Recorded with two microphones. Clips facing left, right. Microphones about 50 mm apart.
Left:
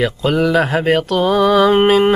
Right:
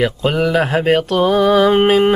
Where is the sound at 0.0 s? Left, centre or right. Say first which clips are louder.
Even; centre.